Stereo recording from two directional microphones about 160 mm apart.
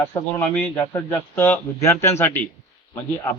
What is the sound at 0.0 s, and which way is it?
A man's voice, 15° left (ahead or behind).